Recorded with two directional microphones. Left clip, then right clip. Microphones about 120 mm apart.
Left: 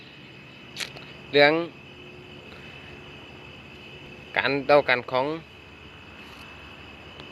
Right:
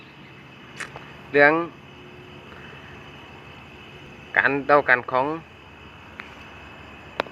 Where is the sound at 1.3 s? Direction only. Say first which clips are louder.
Right 2 dB; 65° left (ahead or behind).